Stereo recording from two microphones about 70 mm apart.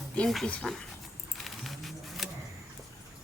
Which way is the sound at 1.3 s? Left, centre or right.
Centre.